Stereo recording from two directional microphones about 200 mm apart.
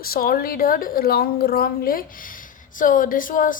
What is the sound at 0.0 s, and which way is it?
A woman's voice, 50° left (ahead or behind).